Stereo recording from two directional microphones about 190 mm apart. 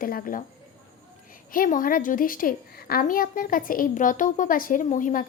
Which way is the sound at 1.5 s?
45° left (ahead or behind).